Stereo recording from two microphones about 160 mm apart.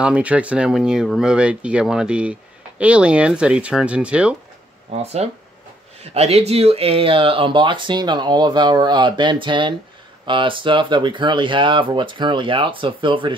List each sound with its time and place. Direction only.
0.0 s speech: 10° right (ahead or behind)
4.9 s speech: 40° right (ahead or behind)